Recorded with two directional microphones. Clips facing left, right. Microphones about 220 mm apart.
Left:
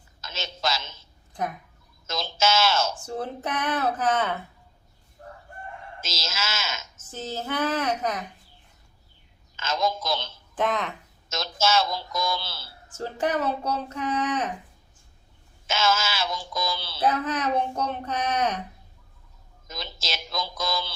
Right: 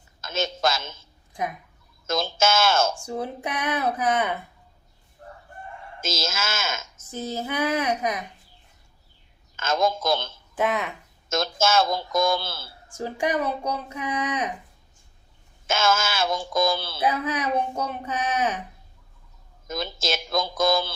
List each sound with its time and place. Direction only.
0.2 s a woman's voice: 50° right (ahead or behind)
2.0 s speech: 50° right (ahead or behind)
2.9 s speech: 15° right (ahead or behind)
6.0 s speech: 50° right (ahead or behind)
6.9 s speech: 10° right (ahead or behind)
9.6 s speech: 50° right (ahead or behind)
10.5 s speech: 10° right (ahead or behind)
11.3 s speech: 50° right (ahead or behind)
12.9 s speech: 15° right (ahead or behind)
15.6 s speech: 50° right (ahead or behind)
17.0 s speech: 10° right (ahead or behind)
19.6 s speech: 50° right (ahead or behind)